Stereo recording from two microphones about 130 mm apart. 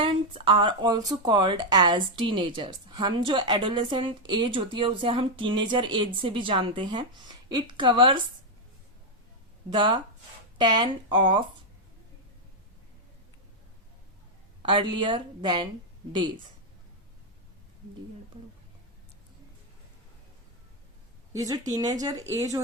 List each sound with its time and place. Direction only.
0.0 s speech: 45° right (ahead or behind)
9.6 s speech: 40° right (ahead or behind)
14.6 s speech: 40° right (ahead or behind)
21.3 s speech: 25° right (ahead or behind)